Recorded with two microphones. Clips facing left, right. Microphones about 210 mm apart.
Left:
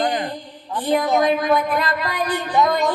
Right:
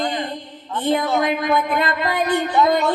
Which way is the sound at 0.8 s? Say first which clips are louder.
Even; 25° right (ahead or behind).